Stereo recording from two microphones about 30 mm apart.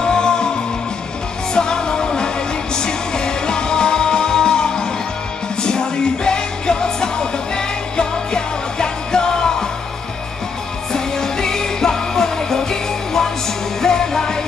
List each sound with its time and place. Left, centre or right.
0.0 s music: left
10.9 s music: centre